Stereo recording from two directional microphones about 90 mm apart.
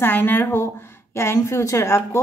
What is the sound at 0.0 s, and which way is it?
Speech, 25° left (ahead or behind).